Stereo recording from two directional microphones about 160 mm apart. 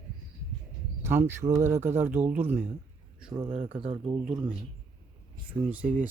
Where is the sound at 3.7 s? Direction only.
5° right (ahead or behind).